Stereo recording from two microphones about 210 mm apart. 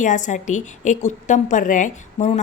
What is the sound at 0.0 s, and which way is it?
A woman's voice, 35° left (ahead or behind).